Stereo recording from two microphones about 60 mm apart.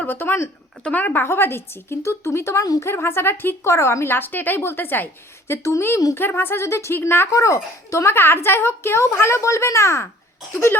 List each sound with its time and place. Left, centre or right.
0.1 s a woman's voice: left
0.9 s speech: left
1.2 s a woman's voice: left
3.7 s a woman's voice: left
5.5 s a woman's voice: left
6.1 s a woman's voice: left
7.3 s speech: left
8.1 s a woman's voice: left